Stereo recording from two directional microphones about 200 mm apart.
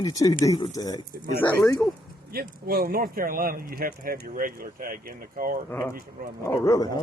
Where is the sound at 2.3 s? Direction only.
50° right (ahead or behind).